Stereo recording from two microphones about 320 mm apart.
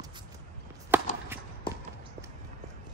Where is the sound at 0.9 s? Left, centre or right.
Centre.